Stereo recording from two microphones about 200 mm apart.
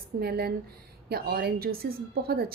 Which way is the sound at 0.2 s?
50° right (ahead or behind).